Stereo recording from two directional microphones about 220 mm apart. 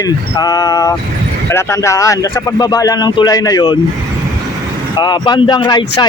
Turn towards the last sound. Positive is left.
turn(degrees=20)  # may be behind; listen again after turning